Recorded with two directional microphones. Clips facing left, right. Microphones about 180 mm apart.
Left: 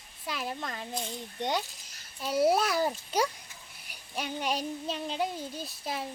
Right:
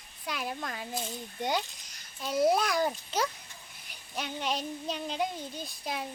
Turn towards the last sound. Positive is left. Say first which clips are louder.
# left 1 dB
turn(degrees=0)  # may be behind; listen again after turning